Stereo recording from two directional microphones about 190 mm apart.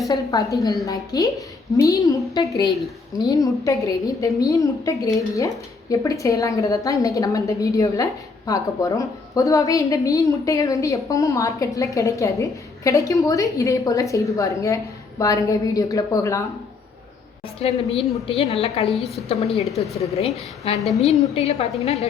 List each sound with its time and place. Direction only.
0.1 s a woman's voice: 15° left (ahead or behind)
17.6 s a woman's voice: 35° left (ahead or behind)
18.9 s a woman's voice: centre (ahead or behind)
21.0 s a woman's voice: 35° left (ahead or behind)